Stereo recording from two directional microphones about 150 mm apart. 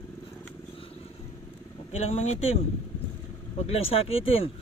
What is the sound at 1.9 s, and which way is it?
Speech, 50° left (ahead or behind).